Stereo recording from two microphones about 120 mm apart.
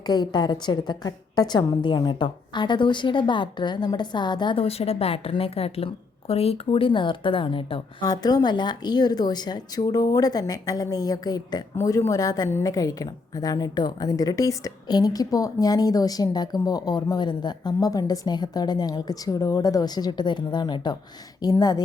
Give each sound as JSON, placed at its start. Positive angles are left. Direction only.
{"t": 0.1, "sound": "a woman's voice", "side_deg": 35}
{"t": 8.0, "sound": "a woman's voice", "side_deg": 30}